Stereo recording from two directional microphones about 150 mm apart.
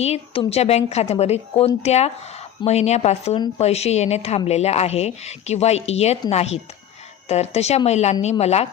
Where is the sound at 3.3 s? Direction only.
30° left (ahead or behind).